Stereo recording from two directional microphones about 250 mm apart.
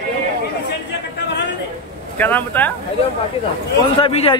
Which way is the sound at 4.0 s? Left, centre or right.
Left.